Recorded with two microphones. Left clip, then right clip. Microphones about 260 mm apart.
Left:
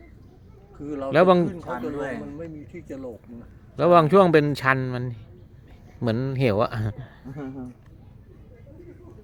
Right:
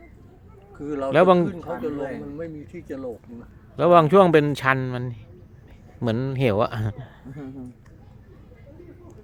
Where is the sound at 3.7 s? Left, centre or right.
Centre.